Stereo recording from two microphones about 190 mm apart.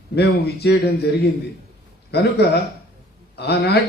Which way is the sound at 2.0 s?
60° left (ahead or behind).